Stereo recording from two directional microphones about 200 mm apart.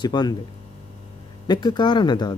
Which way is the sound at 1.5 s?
20° left (ahead or behind).